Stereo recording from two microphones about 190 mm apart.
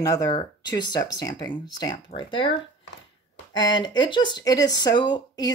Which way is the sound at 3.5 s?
25° left (ahead or behind).